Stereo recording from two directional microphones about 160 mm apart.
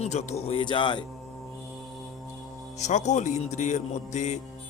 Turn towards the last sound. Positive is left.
turn(degrees=45)  # may be behind; listen again after turning